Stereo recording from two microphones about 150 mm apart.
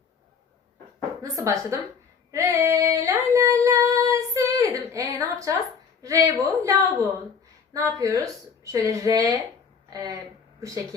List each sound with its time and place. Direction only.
1.2 s a woman's voice: 20° right (ahead or behind)
2.3 s female singing: 20° right (ahead or behind)
6.0 s a woman's voice: 20° right (ahead or behind)